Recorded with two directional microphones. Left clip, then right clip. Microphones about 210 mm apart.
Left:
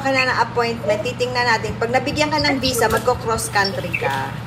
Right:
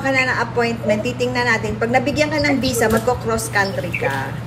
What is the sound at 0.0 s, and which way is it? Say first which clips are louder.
A woman's voice: even; 25° left (ahead or behind).